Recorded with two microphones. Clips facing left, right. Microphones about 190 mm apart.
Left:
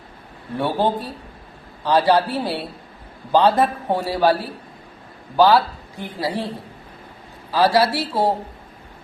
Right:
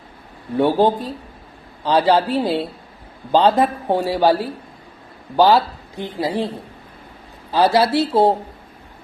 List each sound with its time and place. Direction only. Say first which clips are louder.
0.5 s a woman's voice: right 5 dB; 15° right (ahead or behind)
5.4 s speech: right 1 dB; 20° right (ahead or behind)
7.5 s speech: right 2 dB; 25° right (ahead or behind)